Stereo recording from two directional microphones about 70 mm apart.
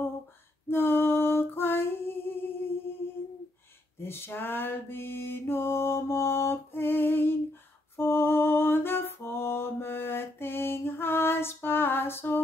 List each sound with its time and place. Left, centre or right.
0.7 s female singing: left
4.0 s mantra: left
7.9 s a sound: left